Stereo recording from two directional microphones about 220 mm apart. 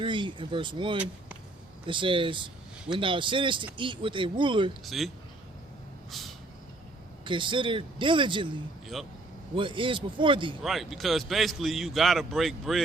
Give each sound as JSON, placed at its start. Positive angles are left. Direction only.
{"t": 0.0, "sound": "speech", "side_deg": -20}
{"t": 4.9, "sound": "a man's voice", "side_deg": 0}
{"t": 6.1, "sound": "vehicle", "side_deg": 0}
{"t": 7.3, "sound": "speech", "side_deg": -20}
{"t": 9.6, "sound": "speech", "side_deg": -20}
{"t": 10.6, "sound": "a man's voice", "side_deg": 0}